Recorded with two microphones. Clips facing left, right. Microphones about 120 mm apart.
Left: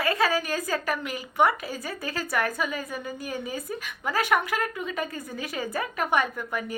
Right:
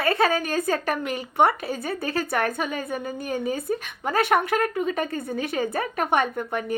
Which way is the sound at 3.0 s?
45° right (ahead or behind).